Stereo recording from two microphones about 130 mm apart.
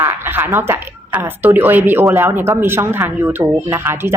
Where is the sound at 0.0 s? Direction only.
15° right (ahead or behind).